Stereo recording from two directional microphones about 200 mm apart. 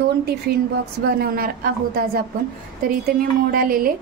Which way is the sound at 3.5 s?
45° right (ahead or behind).